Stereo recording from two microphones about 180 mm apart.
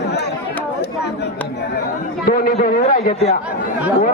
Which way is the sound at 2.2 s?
55° left (ahead or behind).